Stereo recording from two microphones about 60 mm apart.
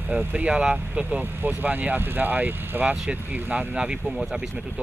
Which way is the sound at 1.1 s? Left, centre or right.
Right.